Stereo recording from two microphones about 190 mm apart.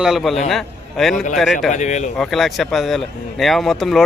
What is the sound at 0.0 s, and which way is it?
Speech, centre (ahead or behind).